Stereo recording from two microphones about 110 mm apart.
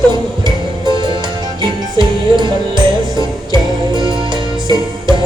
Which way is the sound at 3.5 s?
45° right (ahead or behind).